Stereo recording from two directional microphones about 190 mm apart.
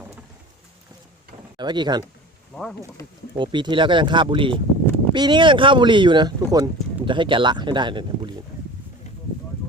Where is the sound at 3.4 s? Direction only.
25° right (ahead or behind).